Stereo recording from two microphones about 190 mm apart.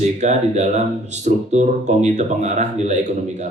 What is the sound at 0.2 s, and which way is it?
Speech, 40° right (ahead or behind).